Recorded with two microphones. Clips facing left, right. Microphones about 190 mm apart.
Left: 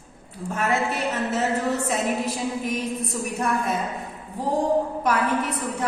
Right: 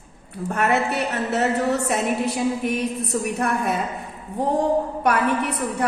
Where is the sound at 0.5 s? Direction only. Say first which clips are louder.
Right 3 dB; 65° right (ahead or behind).